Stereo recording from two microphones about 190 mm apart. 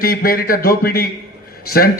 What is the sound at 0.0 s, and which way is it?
A man's voice, 50° left (ahead or behind).